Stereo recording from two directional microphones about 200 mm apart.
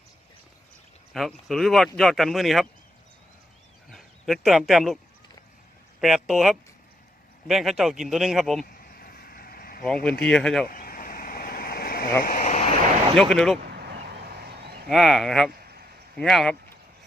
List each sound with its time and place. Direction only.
1.1 s a man's voice: centre (ahead or behind)
3.8 s a sound: centre (ahead or behind)
6.0 s a man's voice: centre (ahead or behind)
8.7 s vehicle: 50° left (ahead or behind)
9.8 s a man's voice: 5° left (ahead or behind)
10.7 s vehicle: 45° left (ahead or behind)
13.1 s a man's voice: centre (ahead or behind)
13.7 s a sound: 55° right (ahead or behind)
14.8 s a man's voice: centre (ahead or behind)
15.6 s a sound: 50° right (ahead or behind)
16.1 s a man's voice: centre (ahead or behind)